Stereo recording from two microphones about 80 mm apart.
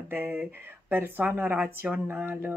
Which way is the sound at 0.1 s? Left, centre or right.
Right.